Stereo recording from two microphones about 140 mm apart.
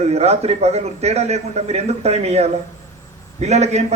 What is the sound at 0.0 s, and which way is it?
A man's voice, 50° right (ahead or behind).